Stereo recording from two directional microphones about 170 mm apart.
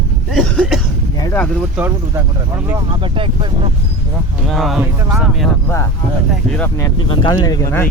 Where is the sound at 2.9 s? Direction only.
30° right (ahead or behind).